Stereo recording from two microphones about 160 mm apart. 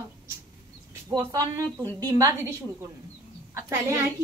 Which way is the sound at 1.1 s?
20° right (ahead or behind).